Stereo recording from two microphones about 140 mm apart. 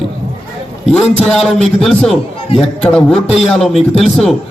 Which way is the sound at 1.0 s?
Centre (ahead or behind).